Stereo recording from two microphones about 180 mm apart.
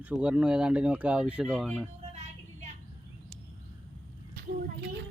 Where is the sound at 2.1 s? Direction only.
40° right (ahead or behind).